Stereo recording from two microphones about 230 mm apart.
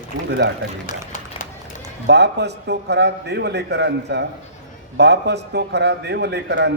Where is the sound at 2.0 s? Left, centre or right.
Right.